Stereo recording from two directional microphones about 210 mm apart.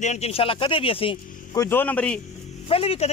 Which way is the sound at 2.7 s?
25° left (ahead or behind).